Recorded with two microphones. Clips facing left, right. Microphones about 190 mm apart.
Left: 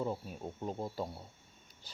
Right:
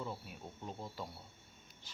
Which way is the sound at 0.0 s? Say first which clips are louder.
Left 7 dB; 40° left (ahead or behind).